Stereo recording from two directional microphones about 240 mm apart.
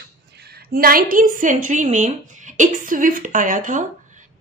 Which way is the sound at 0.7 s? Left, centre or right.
Right.